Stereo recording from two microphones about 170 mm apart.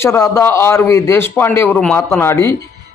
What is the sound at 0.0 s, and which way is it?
A man's voice, 15° left (ahead or behind).